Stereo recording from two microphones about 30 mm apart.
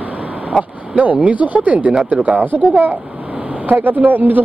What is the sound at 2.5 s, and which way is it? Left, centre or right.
Speech, right.